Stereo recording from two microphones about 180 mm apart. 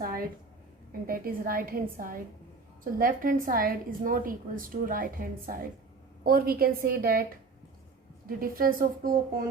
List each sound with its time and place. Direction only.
1.0 s a woman's voice: 55° right (ahead or behind)
8.4 s a woman's voice: 55° right (ahead or behind)